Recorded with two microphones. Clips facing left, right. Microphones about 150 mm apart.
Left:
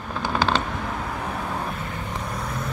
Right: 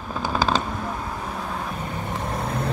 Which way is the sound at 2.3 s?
30° right (ahead or behind).